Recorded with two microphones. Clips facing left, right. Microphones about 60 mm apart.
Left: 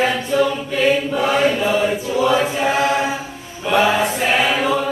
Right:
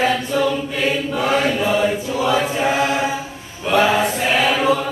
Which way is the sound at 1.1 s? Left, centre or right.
Centre.